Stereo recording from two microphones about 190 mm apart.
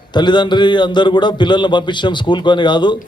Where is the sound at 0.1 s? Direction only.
25° left (ahead or behind).